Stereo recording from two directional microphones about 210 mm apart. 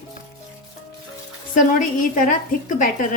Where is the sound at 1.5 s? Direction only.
40° left (ahead or behind).